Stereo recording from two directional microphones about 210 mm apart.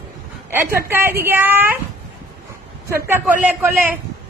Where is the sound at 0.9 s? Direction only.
10° right (ahead or behind).